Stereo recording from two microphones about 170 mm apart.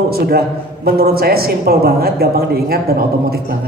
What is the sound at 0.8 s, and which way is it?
Speech, 65° right (ahead or behind).